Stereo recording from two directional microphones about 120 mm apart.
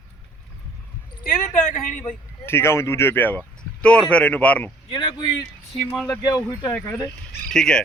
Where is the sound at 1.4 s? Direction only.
90° left.